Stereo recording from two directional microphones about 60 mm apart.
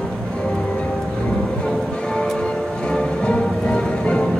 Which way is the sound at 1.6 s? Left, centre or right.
Centre.